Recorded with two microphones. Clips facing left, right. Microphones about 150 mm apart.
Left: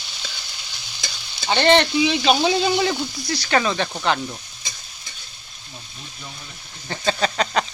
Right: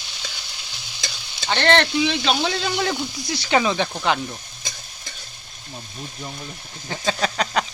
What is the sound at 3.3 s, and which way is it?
Speech, 20° right (ahead or behind).